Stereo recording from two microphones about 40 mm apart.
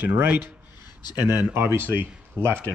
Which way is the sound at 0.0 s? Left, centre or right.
Right.